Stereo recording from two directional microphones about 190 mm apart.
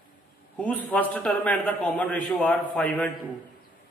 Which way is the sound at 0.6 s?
5° left (ahead or behind).